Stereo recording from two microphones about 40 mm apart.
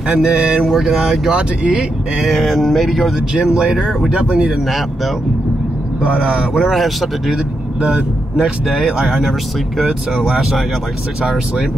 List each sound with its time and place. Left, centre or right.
0.1 s speech: centre
0.6 s speech: centre
0.8 s speech: centre
1.3 s speech: right
2.2 s speech: centre
3.3 s speech: centre
4.6 s speech: centre
6.0 s speech: right
6.5 s speech: centre
8.4 s speech: centre